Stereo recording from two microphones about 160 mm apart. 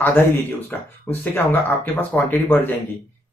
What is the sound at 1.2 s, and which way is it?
A man's voice, 10° left (ahead or behind).